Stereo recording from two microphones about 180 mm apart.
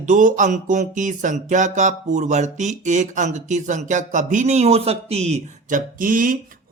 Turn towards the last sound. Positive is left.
turn(degrees=-50)  # may be behind; listen again after turning